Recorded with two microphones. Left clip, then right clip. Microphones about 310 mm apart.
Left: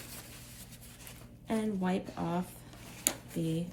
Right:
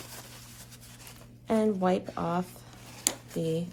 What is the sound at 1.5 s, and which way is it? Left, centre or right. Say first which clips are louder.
Speech: right 8 dB; centre.